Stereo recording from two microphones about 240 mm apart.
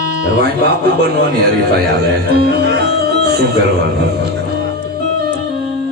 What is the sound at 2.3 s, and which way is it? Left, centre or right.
Speech, right.